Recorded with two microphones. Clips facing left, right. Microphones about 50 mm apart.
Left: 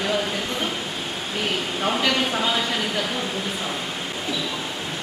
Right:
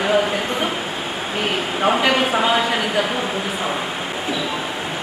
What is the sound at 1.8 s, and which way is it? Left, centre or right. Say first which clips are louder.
A woman's voice: right 6 dB; right.